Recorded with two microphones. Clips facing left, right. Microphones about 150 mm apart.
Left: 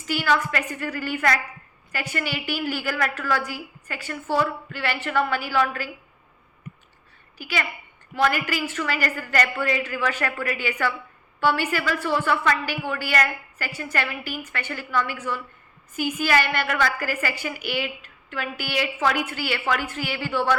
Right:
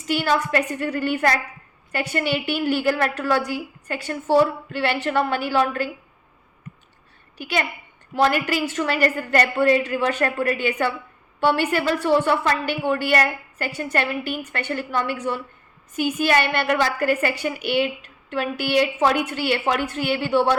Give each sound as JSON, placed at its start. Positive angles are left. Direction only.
{"t": 0.1, "sound": "a woman's voice", "side_deg": -30}
{"t": 8.1, "sound": "a woman's voice", "side_deg": -30}